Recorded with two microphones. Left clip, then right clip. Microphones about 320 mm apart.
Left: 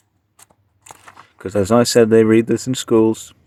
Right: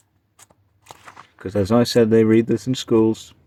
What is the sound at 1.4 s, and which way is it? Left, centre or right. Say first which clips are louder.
Speech: left 4 dB; left.